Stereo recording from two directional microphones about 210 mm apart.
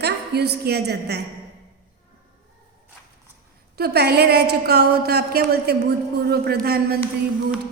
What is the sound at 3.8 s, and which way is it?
Speech, 50° right (ahead or behind).